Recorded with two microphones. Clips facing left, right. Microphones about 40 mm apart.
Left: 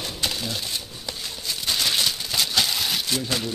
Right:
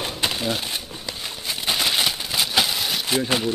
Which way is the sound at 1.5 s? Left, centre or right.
Right.